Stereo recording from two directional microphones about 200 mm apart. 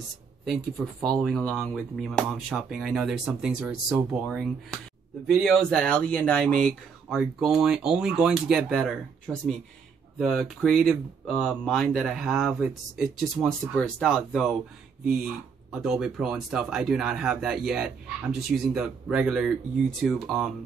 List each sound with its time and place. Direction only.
0.5 s speech: centre (ahead or behind)
5.2 s speech: centre (ahead or behind)
15.7 s speech: 5° right (ahead or behind)